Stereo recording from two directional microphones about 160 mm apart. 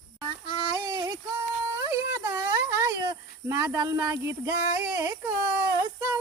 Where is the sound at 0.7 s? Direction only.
25° right (ahead or behind).